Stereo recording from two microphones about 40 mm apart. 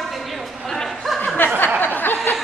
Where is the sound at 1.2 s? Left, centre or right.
Left.